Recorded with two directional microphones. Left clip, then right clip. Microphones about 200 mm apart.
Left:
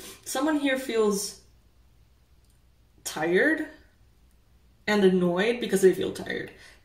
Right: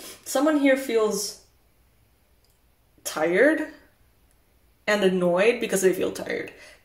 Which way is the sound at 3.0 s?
25° right (ahead or behind).